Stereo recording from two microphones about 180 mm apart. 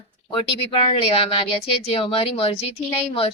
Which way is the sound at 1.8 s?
30° left (ahead or behind).